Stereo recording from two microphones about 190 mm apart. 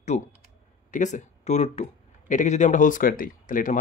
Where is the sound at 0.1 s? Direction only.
40° left (ahead or behind).